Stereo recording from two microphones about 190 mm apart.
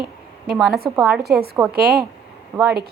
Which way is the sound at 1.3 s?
55° right (ahead or behind).